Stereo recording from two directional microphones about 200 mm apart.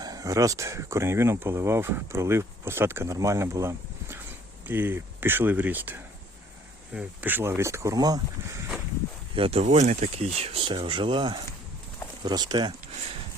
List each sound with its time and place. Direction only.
0.0 s speech: 20° right (ahead or behind)
9.3 s speech: 30° right (ahead or behind)